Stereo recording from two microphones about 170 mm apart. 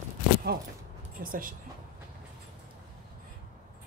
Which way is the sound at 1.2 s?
55° right (ahead or behind).